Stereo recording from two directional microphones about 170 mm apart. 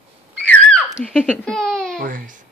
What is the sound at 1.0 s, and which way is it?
Speech, 5° left (ahead or behind).